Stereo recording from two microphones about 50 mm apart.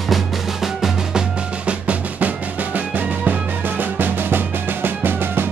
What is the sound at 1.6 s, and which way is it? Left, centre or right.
Music, right.